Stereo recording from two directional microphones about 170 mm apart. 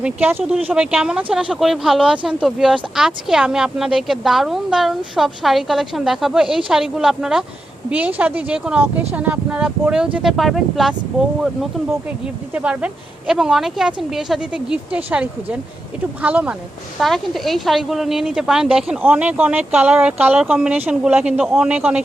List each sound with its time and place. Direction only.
0.0 s speech: 10° right (ahead or behind)
12.5 s speech: 5° right (ahead or behind)